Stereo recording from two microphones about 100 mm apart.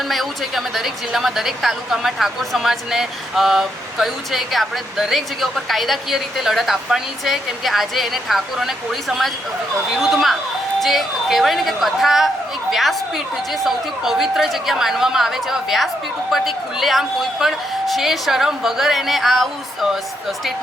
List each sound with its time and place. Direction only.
0.1 s a woman's voice: centre (ahead or behind)